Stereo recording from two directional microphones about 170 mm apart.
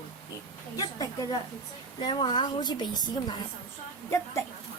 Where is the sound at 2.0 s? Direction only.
25° left (ahead or behind).